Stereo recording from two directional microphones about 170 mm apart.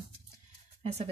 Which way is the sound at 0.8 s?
40° right (ahead or behind).